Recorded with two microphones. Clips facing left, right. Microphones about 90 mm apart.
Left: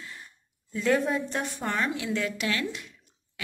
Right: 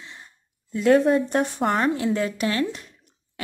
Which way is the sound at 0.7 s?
60° right (ahead or behind).